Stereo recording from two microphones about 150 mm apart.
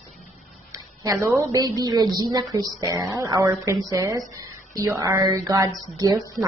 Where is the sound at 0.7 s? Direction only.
20° right (ahead or behind).